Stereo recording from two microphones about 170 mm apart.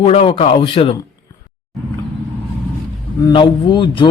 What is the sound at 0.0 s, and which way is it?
Speech, 35° left (ahead or behind).